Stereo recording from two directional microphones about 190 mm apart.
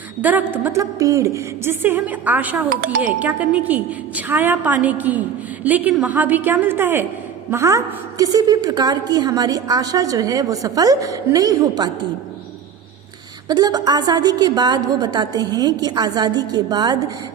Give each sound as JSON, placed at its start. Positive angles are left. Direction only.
{"t": 0.2, "sound": "a woman's voice", "side_deg": -10}
{"t": 2.6, "sound": "speech", "side_deg": -45}
{"t": 3.0, "sound": "a woman's voice", "side_deg": -10}
{"t": 13.5, "sound": "a woman's voice", "side_deg": -20}